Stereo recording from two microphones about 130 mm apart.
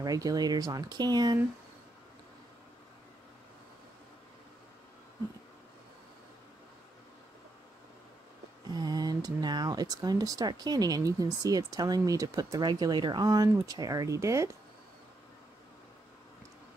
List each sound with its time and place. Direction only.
0.0 s speech: 25° right (ahead or behind)
8.6 s speech: 30° right (ahead or behind)